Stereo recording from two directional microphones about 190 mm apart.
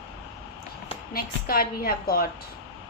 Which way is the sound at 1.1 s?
50° left (ahead or behind).